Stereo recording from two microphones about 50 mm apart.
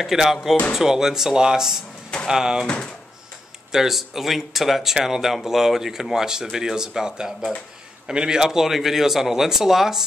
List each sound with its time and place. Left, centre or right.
0.0 s speech: centre
2.6 s speech: left
3.7 s speech: centre